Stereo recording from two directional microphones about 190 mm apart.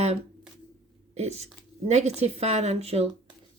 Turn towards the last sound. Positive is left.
turn(degrees=-35)  # may be behind; listen again after turning